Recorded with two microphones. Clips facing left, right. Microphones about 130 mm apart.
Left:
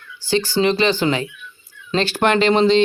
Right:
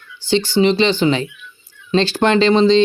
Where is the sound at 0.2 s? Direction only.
25° right (ahead or behind).